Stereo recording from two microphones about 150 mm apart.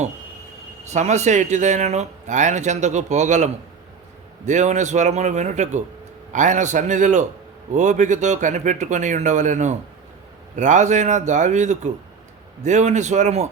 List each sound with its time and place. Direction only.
0.9 s speech: 50° right (ahead or behind)